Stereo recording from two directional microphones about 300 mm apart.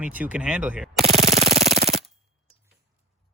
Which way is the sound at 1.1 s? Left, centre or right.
Right.